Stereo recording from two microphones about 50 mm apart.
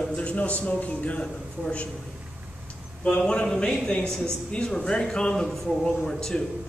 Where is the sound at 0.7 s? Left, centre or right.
Left.